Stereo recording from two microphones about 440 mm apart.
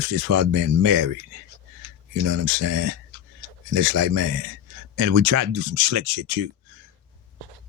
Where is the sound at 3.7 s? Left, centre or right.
Right.